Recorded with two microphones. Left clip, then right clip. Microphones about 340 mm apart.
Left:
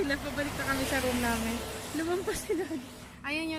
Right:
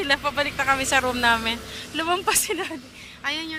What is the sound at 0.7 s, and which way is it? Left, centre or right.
Speech, right.